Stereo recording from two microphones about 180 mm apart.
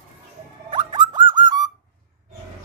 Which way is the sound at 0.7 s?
25° right (ahead or behind).